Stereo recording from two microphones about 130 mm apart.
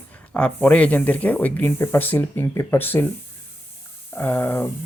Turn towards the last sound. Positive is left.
turn(degrees=15)  # may be behind; listen again after turning